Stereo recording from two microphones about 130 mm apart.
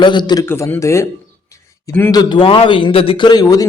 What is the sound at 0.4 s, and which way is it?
Speech, 20° left (ahead or behind).